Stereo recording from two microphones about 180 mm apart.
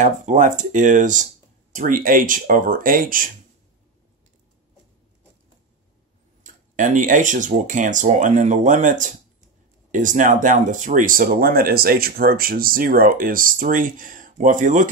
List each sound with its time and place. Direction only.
0.0 s speech: 45° right (ahead or behind)
6.4 s speech: 45° right (ahead or behind)